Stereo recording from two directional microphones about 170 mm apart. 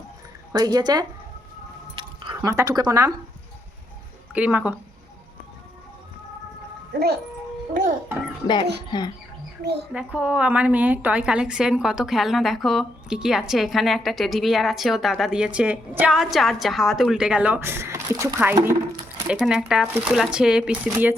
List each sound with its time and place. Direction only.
0.5 s speech: 20° right (ahead or behind)
2.0 s a sound: 25° right (ahead or behind)
4.4 s speech: 10° right (ahead or behind)
7.7 s a child's voice: 50° right (ahead or behind)
8.9 s speech: 25° left (ahead or behind)
9.9 s a woman's voice: 5° right (ahead or behind)
19.3 s a woman's voice: 5° right (ahead or behind)